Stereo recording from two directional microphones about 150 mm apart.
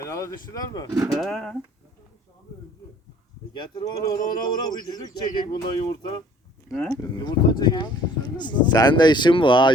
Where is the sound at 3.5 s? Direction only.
25° left (ahead or behind).